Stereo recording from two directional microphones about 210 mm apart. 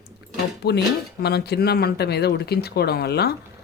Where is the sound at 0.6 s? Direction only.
50° left (ahead or behind).